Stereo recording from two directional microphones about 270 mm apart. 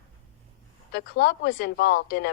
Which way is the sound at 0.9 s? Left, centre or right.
Left.